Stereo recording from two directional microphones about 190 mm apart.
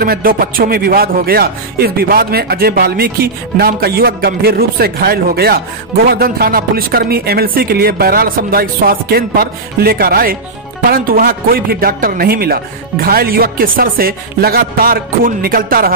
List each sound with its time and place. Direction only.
0.0 s a man's voice: 50° right (ahead or behind)